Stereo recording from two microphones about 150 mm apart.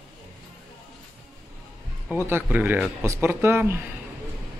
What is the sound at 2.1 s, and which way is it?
A man's voice, 15° right (ahead or behind).